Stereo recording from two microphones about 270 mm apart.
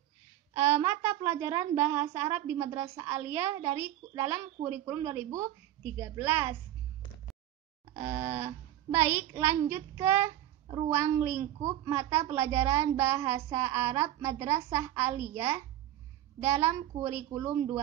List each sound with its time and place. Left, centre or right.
0.6 s a child's voice: centre
8.0 s a child's voice: centre